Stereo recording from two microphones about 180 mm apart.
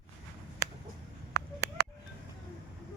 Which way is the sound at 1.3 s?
65° right (ahead or behind).